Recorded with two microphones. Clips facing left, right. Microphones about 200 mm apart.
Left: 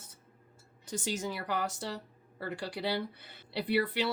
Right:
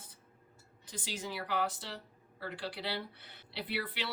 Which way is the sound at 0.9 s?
45° left (ahead or behind).